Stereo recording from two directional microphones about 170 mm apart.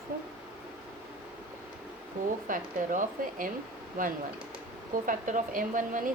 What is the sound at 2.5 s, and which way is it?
A woman's voice, 50° right (ahead or behind).